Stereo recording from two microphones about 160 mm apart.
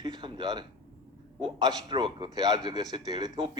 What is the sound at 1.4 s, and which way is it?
A man's voice, 30° right (ahead or behind).